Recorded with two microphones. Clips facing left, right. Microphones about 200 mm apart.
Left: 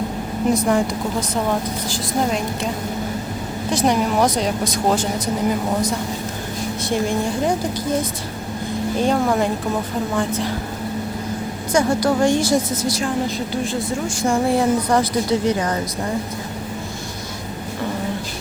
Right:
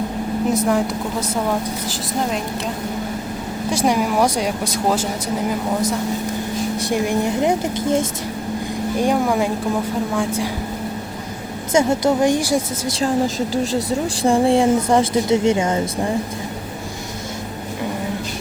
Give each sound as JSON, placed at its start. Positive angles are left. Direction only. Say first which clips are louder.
{"t": 0.5, "sound": "a woman's voice", "louder": "left 1 dB", "side_deg": -5}
{"t": 3.7, "sound": "speech", "louder": "even", "side_deg": -10}
{"t": 6.8, "sound": "speech", "louder": "even", "side_deg": -15}
{"t": 9.2, "sound": "a woman's voice", "louder": "even", "side_deg": 0}
{"t": 11.7, "sound": "speech", "louder": "right 1 dB", "side_deg": -25}
{"t": 13.7, "sound": "speech", "louder": "right 3 dB", "side_deg": -30}